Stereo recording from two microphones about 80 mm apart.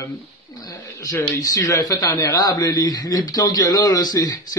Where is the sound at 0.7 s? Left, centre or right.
Left.